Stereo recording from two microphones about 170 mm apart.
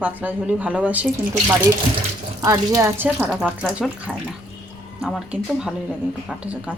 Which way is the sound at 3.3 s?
Centre (ahead or behind).